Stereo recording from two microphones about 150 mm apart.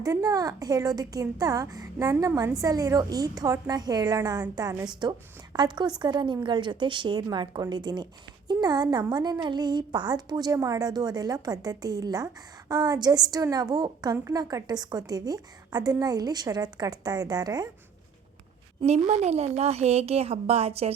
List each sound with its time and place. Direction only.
0.0 s a woman's voice: 25° right (ahead or behind)
18.8 s a woman's voice: 40° right (ahead or behind)
19.0 s a woman's voice: 50° right (ahead or behind)